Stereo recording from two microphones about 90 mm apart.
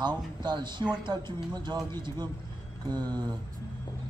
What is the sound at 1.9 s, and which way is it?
Speech, 55° right (ahead or behind).